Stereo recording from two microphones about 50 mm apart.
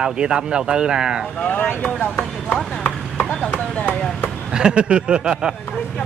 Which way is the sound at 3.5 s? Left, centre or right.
Left.